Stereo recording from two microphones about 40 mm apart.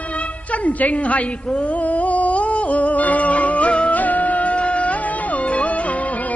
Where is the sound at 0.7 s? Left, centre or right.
Left.